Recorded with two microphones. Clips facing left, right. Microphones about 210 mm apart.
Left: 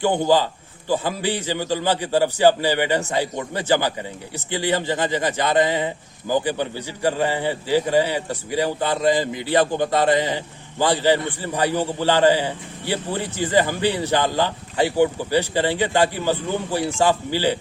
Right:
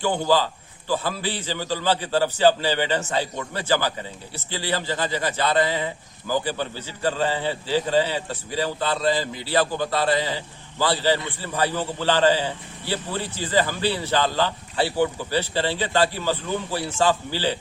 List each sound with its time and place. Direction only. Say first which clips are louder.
0.0 s speech: left 3 dB; 15° left (ahead or behind)